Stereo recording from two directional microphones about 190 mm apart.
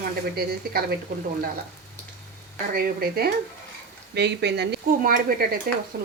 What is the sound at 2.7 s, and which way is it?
A woman's voice, 55° right (ahead or behind).